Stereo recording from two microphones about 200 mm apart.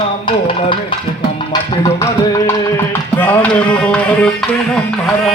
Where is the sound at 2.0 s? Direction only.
15° left (ahead or behind).